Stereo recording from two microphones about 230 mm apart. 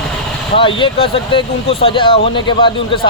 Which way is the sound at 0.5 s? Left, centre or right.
Left.